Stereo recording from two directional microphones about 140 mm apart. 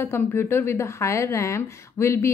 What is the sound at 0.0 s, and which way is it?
A woman's voice, 15° left (ahead or behind).